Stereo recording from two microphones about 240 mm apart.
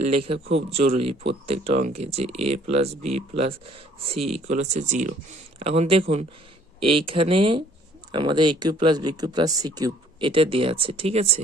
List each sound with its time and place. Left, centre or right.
0.7 s speech: right